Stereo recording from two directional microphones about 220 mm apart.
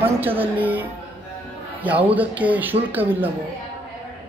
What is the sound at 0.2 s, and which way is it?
A man's voice, 10° right (ahead or behind).